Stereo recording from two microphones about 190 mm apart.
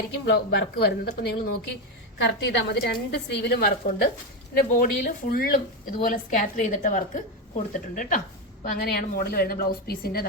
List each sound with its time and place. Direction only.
0.5 s a woman's voice: 65° left (ahead or behind)